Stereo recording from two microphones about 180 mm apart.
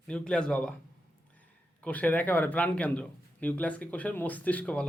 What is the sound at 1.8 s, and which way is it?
A man's voice, 10° left (ahead or behind).